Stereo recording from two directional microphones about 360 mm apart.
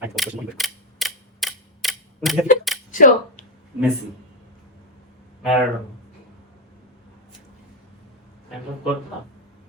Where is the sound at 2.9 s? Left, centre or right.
Left.